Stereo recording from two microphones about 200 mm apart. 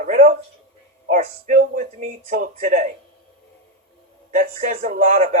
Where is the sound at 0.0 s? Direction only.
40° right (ahead or behind).